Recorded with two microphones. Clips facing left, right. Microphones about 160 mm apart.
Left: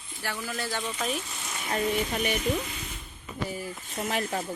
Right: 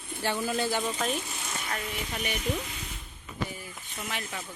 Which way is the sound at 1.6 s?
30° left (ahead or behind).